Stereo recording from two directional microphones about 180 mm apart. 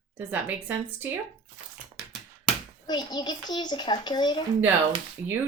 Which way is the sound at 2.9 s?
25° left (ahead or behind).